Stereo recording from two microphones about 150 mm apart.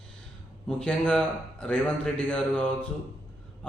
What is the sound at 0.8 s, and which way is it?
A man's voice, 5° left (ahead or behind).